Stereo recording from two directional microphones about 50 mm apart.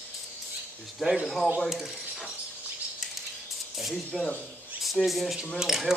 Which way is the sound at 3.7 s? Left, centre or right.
Centre.